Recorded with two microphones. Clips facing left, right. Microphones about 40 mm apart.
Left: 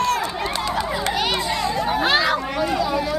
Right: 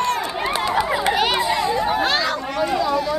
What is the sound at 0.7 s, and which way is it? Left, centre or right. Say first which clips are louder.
Chatter: right 6 dB; centre.